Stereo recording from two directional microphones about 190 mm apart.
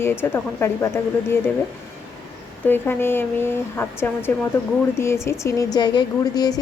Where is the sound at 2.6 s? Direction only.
10° left (ahead or behind).